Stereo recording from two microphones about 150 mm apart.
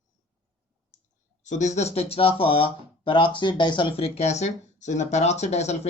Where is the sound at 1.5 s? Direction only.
50° left (ahead or behind).